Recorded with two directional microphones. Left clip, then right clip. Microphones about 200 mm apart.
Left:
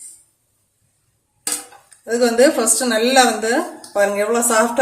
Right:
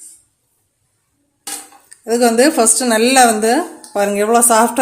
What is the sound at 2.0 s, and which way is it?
Speech, 40° right (ahead or behind).